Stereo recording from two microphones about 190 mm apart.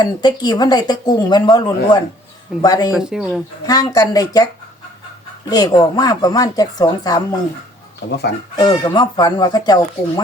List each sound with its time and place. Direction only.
0.0 s speech: 20° left (ahead or behind)
2.9 s speech: 5° right (ahead or behind)
3.7 s speech: 20° left (ahead or behind)
5.5 s speech: 20° left (ahead or behind)
8.5 s speech: 20° left (ahead or behind)